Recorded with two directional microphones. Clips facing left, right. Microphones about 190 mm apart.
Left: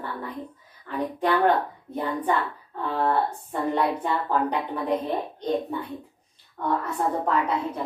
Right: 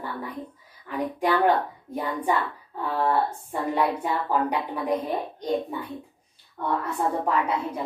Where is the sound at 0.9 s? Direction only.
10° right (ahead or behind).